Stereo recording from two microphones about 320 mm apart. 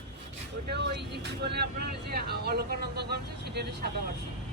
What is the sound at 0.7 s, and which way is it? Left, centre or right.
Speech, right.